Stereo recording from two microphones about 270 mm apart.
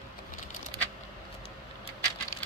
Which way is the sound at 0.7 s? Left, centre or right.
Centre.